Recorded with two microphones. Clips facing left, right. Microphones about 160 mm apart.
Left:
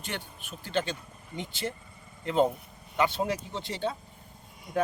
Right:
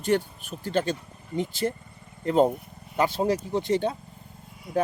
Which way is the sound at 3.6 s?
45° right (ahead or behind).